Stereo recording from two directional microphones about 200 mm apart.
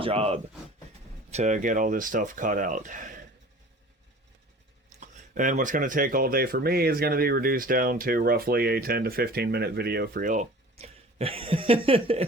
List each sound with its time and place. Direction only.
0.0 s speech: 30° right (ahead or behind)
4.9 s speech: 40° right (ahead or behind)